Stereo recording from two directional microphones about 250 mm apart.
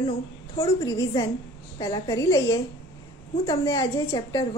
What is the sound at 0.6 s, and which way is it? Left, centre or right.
A woman's voice, centre.